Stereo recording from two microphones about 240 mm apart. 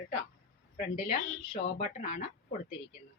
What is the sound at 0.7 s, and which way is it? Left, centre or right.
A woman's voice, left.